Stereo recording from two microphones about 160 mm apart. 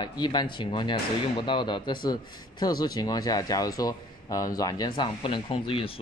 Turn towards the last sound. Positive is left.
turn(degrees=35)  # may be behind; listen again after turning